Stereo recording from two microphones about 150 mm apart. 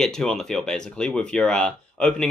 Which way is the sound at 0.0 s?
5° left (ahead or behind).